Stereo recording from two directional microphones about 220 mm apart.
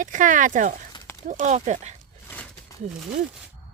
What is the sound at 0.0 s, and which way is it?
Speech, 35° right (ahead or behind).